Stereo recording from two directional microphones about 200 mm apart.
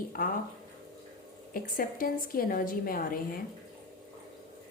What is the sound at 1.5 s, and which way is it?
A woman's voice, 45° left (ahead or behind).